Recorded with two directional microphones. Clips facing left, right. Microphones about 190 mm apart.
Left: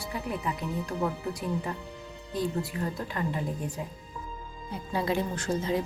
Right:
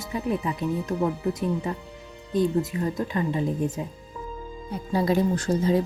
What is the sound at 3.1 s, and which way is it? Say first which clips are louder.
Speech: right 6 dB; 20° right (ahead or behind).